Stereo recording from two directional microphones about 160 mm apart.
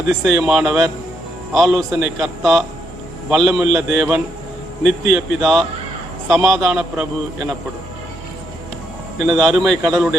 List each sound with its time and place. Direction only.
0.1 s a man's voice: centre (ahead or behind)
9.1 s a man's voice: centre (ahead or behind)